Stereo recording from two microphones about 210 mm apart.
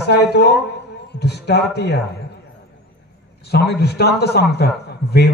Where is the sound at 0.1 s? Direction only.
50° left (ahead or behind).